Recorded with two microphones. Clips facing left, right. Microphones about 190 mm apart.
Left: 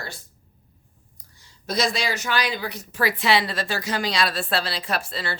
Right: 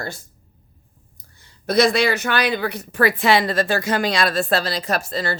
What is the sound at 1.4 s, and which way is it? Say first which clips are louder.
Speech: right 8 dB; 60° right (ahead or behind).